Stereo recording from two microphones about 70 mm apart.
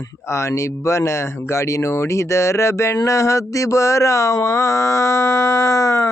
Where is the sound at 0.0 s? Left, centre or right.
Left.